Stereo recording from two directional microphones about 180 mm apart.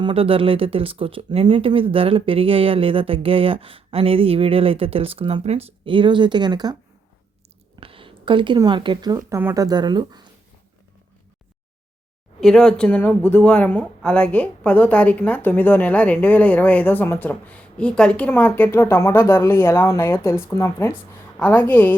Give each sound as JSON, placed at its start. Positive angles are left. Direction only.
{"t": 0.0, "sound": "speech", "side_deg": -30}
{"t": 7.8, "sound": "speech", "side_deg": -30}
{"t": 12.4, "sound": "speech", "side_deg": 5}